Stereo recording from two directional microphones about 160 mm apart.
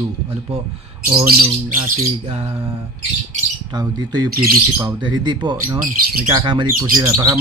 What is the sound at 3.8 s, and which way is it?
Speech, 25° right (ahead or behind).